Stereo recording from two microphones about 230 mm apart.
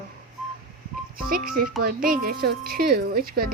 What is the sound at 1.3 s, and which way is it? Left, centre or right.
Speech, right.